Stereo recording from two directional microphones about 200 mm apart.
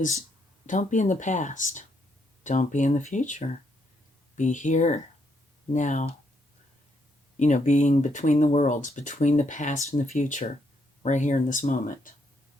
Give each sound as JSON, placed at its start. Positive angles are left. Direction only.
{"t": 0.7, "sound": "speech", "side_deg": 40}
{"t": 7.3, "sound": "speech", "side_deg": 35}